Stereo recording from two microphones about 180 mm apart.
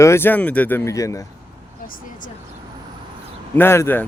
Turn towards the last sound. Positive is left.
turn(degrees=10)  # may be behind; listen again after turning